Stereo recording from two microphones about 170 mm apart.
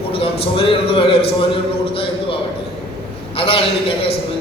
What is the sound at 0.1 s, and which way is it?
A man's voice, 35° left (ahead or behind).